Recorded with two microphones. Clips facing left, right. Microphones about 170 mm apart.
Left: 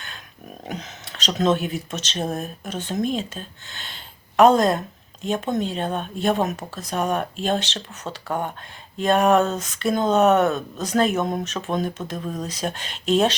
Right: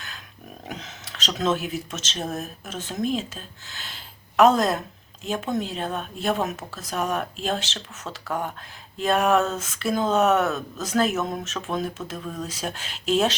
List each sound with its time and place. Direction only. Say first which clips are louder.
0.7 s speech: left 4 dB; centre (ahead or behind)
8.3 s speech: left 2 dB; 30° left (ahead or behind)
9.0 s speech: left 3 dB; centre (ahead or behind)